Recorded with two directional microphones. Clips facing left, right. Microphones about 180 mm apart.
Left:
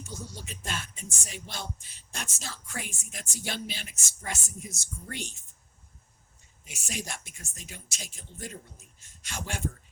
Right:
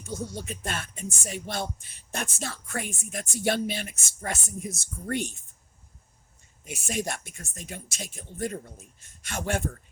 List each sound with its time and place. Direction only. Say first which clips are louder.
0.0 s speech: right 7 dB; 55° right (ahead or behind)
6.7 s speech: right 7 dB; 55° right (ahead or behind)